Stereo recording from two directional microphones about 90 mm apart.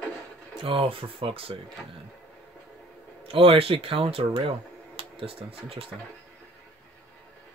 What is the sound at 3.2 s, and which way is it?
Speech, 90° right.